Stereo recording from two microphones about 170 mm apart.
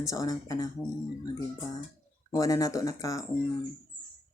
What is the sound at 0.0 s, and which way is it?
Speech, 20° left (ahead or behind).